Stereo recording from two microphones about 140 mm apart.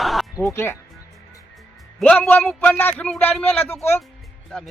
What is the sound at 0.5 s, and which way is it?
Speech, 20° left (ahead or behind).